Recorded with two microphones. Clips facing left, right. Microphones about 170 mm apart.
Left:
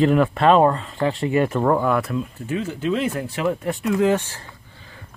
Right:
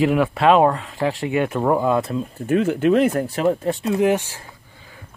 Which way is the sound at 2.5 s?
60° right (ahead or behind).